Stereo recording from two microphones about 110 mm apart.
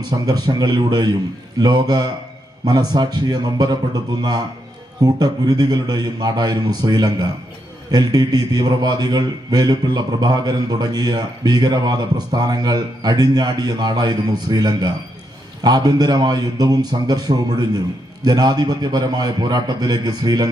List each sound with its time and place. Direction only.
0.3 s speech: 40° right (ahead or behind)